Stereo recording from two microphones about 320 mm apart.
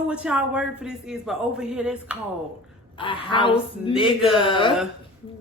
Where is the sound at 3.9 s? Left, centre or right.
Centre.